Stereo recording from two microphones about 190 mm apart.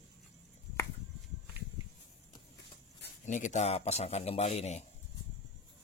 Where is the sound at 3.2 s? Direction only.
40° left (ahead or behind).